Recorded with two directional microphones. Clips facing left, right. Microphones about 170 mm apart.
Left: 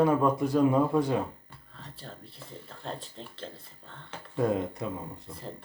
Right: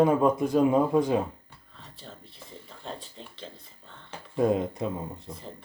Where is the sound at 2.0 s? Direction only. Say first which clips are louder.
Even; centre (ahead or behind).